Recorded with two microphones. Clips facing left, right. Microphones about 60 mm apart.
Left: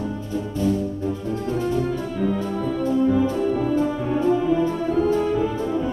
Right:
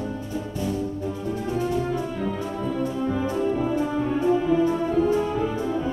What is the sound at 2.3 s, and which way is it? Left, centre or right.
Music, centre.